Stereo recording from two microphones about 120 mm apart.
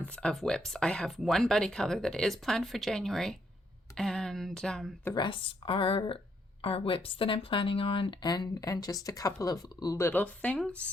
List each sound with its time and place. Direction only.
0.0 s speech: 10° left (ahead or behind)
5.1 s speech: 45° left (ahead or behind)
10.0 s speech: 15° left (ahead or behind)